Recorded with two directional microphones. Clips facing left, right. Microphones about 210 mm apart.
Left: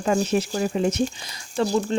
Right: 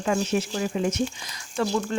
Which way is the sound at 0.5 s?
40° left (ahead or behind).